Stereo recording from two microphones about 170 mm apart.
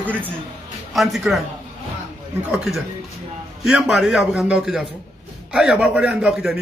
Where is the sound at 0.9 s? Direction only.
Centre (ahead or behind).